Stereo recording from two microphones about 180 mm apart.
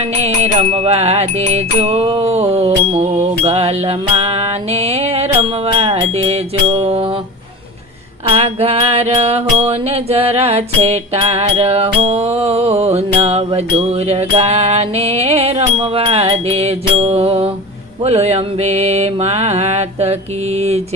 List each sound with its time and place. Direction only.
0.2 s music: 35° right (ahead or behind)
8.3 s music: 35° right (ahead or behind)